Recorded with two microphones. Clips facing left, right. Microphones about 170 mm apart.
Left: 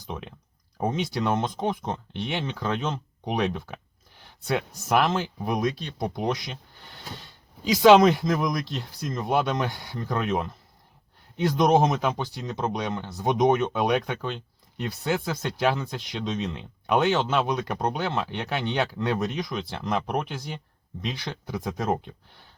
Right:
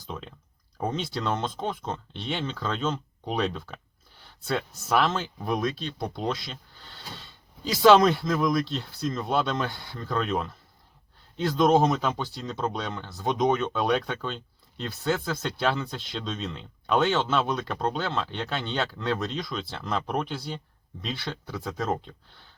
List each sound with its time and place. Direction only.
0.0 s speech: 15° left (ahead or behind)